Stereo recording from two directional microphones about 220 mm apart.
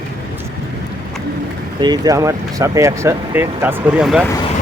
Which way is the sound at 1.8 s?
20° right (ahead or behind).